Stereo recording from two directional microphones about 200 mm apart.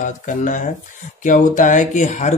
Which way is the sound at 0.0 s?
40° left (ahead or behind).